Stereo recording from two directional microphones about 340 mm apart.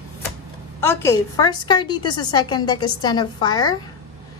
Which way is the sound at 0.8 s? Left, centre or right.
Centre.